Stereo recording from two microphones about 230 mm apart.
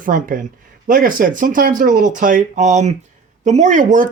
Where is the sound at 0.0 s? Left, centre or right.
Right.